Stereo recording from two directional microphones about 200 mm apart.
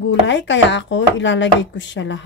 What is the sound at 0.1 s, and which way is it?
Speech, 65° left (ahead or behind).